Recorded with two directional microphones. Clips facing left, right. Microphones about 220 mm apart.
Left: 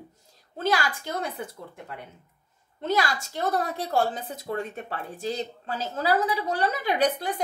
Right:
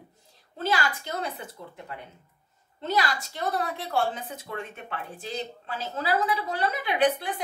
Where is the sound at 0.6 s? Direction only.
45° left (ahead or behind).